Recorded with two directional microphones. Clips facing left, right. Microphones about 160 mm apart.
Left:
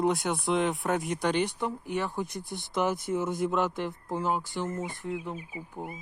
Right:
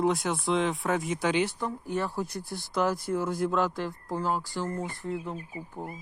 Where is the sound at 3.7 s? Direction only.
20° left (ahead or behind).